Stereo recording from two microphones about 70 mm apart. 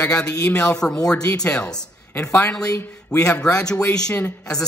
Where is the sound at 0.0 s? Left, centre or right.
Centre.